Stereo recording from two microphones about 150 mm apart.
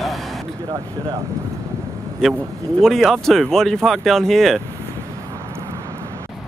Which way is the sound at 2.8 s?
Centre (ahead or behind).